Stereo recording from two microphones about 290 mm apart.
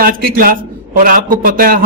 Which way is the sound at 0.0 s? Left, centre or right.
Right.